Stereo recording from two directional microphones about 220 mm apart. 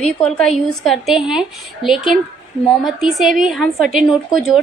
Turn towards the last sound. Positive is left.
turn(degrees=0)  # may be behind; listen again after turning